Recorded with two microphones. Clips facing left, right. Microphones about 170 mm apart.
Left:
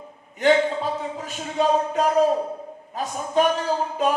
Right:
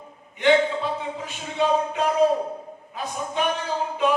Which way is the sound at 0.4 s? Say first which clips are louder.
Even; 40° left (ahead or behind).